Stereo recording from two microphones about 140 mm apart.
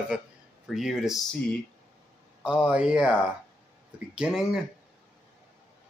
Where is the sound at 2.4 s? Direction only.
10° right (ahead or behind).